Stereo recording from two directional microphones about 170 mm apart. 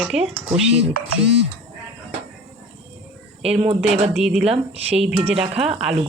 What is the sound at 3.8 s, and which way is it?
Speech, 40° right (ahead or behind).